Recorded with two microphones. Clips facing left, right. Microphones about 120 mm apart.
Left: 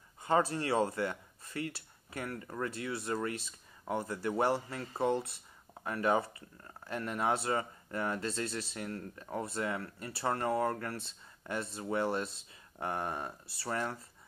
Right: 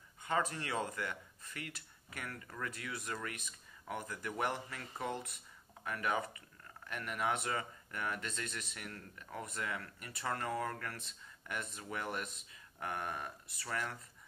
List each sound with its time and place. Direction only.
0.2 s speech: 35° left (ahead or behind)